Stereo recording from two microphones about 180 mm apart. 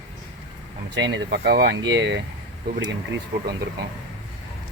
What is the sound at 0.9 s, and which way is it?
Speech, 80° right.